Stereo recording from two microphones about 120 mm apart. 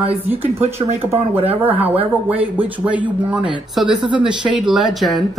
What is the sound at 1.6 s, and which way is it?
Speech, 15° right (ahead or behind).